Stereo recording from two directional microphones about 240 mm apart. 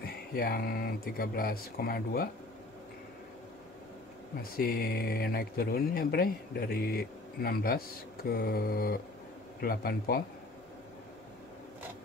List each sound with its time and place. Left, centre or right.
0.0 s speech: left
4.4 s speech: left